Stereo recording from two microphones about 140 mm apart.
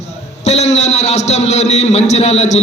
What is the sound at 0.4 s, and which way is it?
A man's voice, 50° left (ahead or behind).